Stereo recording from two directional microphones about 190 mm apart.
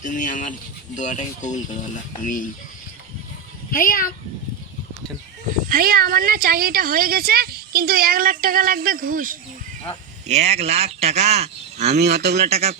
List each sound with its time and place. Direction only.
0.0 s speech: 40° left (ahead or behind)
3.7 s speech: 50° left (ahead or behind)
5.6 s speech: 50° right (ahead or behind)
10.2 s speech: 35° right (ahead or behind)
11.9 s speech: 60° right (ahead or behind)
12.5 s speech: 35° right (ahead or behind)